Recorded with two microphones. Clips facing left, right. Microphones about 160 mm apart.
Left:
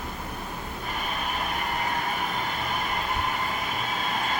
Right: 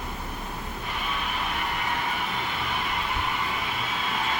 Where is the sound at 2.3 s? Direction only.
45° left (ahead or behind).